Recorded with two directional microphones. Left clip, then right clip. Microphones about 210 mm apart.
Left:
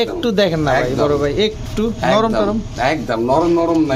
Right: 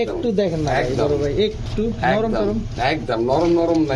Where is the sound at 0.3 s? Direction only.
55° left (ahead or behind).